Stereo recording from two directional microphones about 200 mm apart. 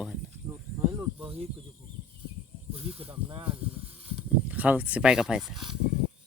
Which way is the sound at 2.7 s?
30° right (ahead or behind).